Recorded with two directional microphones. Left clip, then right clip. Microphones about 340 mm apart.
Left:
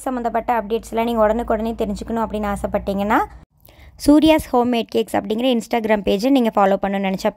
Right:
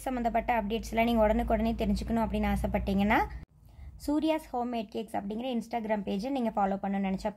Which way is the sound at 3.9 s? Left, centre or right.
Left.